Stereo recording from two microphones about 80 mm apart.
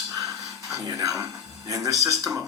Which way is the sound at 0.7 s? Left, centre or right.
Right.